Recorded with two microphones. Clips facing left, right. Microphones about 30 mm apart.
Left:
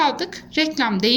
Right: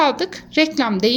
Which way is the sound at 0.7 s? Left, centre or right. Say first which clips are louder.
Right 1 dB; centre.